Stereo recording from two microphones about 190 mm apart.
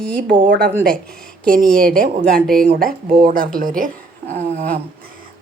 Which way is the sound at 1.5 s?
50° right (ahead or behind).